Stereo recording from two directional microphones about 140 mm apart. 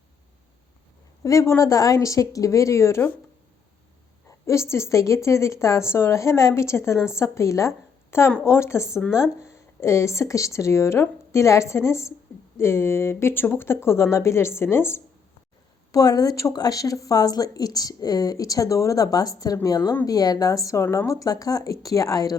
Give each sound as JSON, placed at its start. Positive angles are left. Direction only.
{"t": 1.2, "sound": "speech", "side_deg": 20}
{"t": 4.3, "sound": "a sound", "side_deg": 20}
{"t": 4.7, "sound": "a woman's voice", "side_deg": 20}